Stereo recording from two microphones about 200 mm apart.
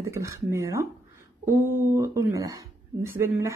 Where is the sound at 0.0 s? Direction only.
15° right (ahead or behind).